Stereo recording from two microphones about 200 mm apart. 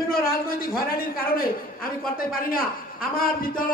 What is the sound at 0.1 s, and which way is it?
Speech, 45° left (ahead or behind).